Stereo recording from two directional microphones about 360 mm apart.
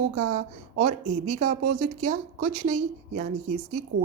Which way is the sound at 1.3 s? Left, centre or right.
Centre.